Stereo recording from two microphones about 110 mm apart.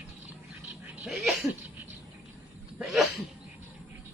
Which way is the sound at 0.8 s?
15° right (ahead or behind).